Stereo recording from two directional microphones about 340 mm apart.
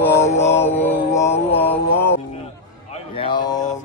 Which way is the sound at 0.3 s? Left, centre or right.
Centre.